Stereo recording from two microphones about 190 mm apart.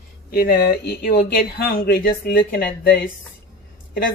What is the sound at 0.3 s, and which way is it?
Speech, 50° left (ahead or behind).